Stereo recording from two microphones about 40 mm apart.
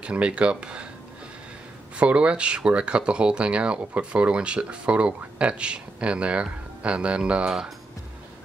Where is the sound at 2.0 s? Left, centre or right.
Right.